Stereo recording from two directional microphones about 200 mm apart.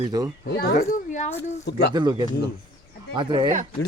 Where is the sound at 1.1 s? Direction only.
35° left (ahead or behind).